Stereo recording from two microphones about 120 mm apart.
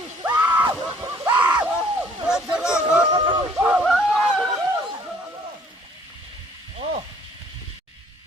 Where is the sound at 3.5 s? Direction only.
5° right (ahead or behind).